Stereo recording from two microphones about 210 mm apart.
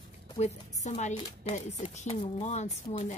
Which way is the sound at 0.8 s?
35° left (ahead or behind).